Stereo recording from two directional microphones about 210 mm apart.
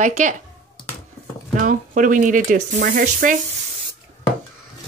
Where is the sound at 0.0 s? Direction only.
35° right (ahead or behind).